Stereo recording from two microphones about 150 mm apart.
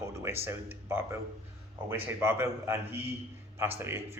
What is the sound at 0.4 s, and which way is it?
Speech, 15° right (ahead or behind).